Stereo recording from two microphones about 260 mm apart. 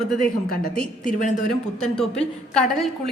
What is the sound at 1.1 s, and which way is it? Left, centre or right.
Speech, left.